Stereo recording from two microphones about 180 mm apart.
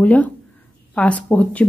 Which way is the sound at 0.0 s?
10° left (ahead or behind).